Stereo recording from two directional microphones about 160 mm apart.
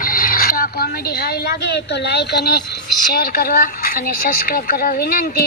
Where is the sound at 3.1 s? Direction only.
65° left (ahead or behind).